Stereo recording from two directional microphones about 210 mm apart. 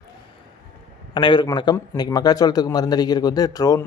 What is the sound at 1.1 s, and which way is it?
A man's voice, 20° left (ahead or behind).